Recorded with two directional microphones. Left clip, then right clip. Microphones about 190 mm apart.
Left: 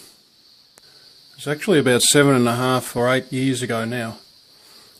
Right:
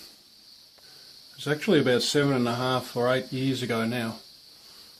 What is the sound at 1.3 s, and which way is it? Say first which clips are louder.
Speech: left 5 dB; 25° left (ahead or behind).